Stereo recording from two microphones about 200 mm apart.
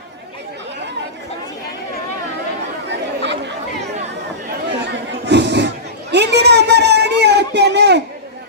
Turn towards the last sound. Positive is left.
turn(degrees=-60)  # may be behind; listen again after turning